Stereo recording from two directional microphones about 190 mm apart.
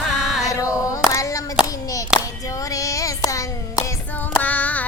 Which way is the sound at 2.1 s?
5° right (ahead or behind).